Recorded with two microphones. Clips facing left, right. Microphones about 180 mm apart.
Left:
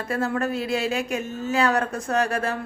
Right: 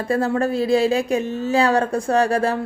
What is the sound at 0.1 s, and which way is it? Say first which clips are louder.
A woman's voice: right 5 dB; 35° right (ahead or behind).